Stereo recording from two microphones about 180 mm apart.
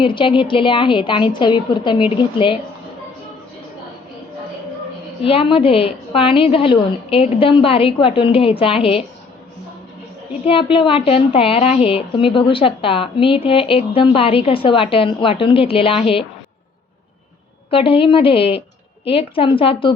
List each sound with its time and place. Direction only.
0.0 s a woman's voice: 30° left (ahead or behind)
5.2 s a woman's voice: 30° left (ahead or behind)
10.4 s a woman's voice: 30° left (ahead or behind)
17.7 s a woman's voice: 30° left (ahead or behind)